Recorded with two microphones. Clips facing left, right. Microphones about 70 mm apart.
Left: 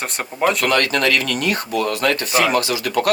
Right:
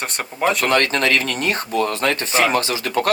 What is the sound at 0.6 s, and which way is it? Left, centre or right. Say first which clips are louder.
Speech: even; right.